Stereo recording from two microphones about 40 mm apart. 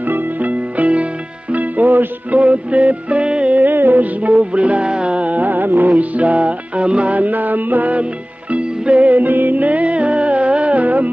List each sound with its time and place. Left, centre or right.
0.1 s music: right
2.4 s music: right
3.5 s music: right
8.0 s music: right